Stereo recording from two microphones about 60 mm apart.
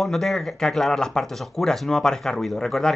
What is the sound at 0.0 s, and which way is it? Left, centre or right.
Speech, centre.